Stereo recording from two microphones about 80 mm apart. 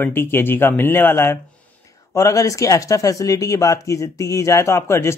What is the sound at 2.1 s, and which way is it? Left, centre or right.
Speech, left.